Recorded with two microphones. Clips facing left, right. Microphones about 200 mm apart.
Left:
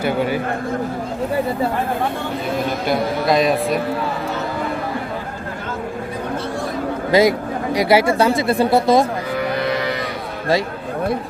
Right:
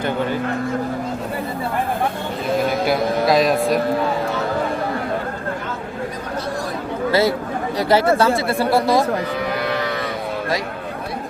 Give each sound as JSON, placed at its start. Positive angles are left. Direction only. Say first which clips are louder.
{"t": 0.0, "sound": "speech", "louder": "left 2 dB", "side_deg": 10}
{"t": 2.8, "sound": "a man's voice", "louder": "right 1 dB", "side_deg": 0}
{"t": 7.1, "sound": "speech", "louder": "left 4 dB", "side_deg": 15}